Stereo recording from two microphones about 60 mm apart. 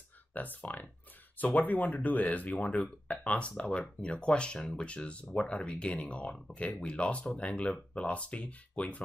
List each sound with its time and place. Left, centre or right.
0.3 s speech: left